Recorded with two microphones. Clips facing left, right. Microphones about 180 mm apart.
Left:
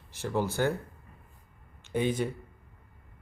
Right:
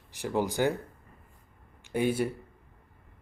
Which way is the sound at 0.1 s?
15° right (ahead or behind).